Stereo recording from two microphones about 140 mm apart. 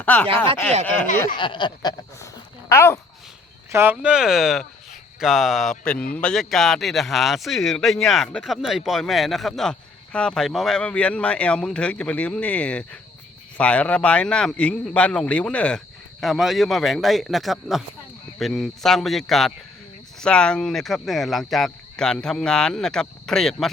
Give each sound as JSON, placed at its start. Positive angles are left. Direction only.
{"t": 0.0, "sound": "chopping", "side_deg": 10}
{"t": 0.9, "sound": "speech", "side_deg": 10}
{"t": 1.4, "sound": "speech", "side_deg": 35}
{"t": 3.7, "sound": "speech", "side_deg": -15}